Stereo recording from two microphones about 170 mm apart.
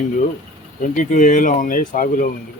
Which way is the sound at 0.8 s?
50° left (ahead or behind).